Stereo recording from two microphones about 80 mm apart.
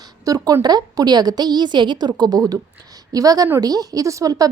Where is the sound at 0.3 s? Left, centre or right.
Right.